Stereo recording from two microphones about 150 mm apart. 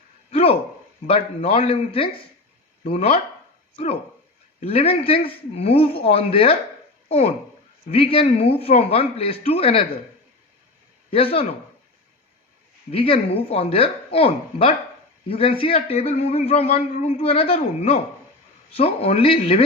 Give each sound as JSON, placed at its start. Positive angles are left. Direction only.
{"t": 0.3, "sound": "a sound", "side_deg": 40}
{"t": 1.0, "sound": "a man's voice", "side_deg": 40}
{"t": 4.6, "sound": "a man's voice", "side_deg": 40}
{"t": 11.1, "sound": "speech", "side_deg": 40}
{"t": 12.9, "sound": "a man's voice", "side_deg": 40}